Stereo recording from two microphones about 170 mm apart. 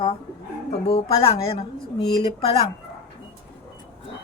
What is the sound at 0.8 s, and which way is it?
Speech, 35° left (ahead or behind).